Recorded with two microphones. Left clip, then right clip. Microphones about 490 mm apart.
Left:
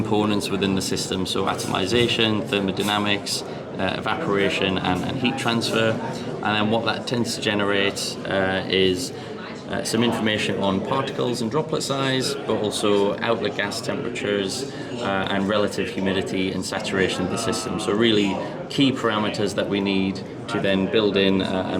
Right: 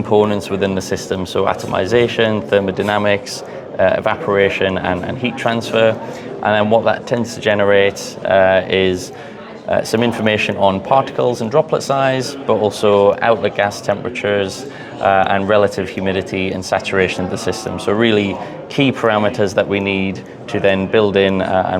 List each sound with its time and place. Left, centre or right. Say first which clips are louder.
0.1 s speech: right 10 dB; right